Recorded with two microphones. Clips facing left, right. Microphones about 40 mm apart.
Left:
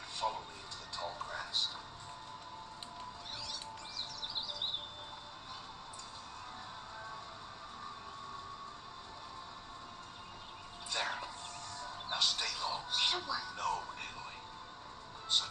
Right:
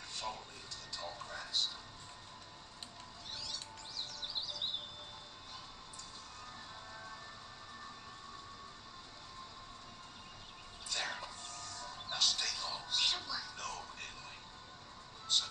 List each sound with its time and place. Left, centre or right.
0.2 s speech: centre
0.9 s music: left
10.9 s a sound: left
11.8 s music: left